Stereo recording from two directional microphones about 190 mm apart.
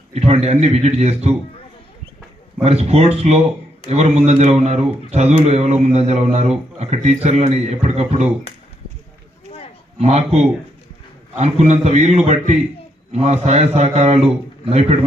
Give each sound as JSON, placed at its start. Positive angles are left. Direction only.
{"t": 0.1, "sound": "speech", "side_deg": -35}
{"t": 2.6, "sound": "speech", "side_deg": -35}
{"t": 10.0, "sound": "speech", "side_deg": -35}